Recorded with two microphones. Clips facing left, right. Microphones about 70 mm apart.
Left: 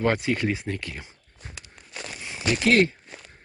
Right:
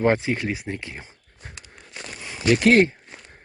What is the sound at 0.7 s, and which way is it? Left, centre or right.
Speech, right.